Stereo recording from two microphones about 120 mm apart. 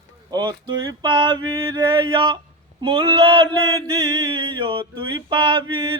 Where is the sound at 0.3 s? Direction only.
35° right (ahead or behind).